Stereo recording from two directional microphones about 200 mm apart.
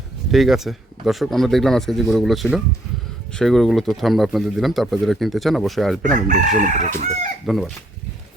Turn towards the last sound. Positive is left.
turn(degrees=0)  # may be behind; listen again after turning